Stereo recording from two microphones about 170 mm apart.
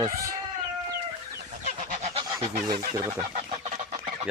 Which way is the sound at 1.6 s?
45° right (ahead or behind).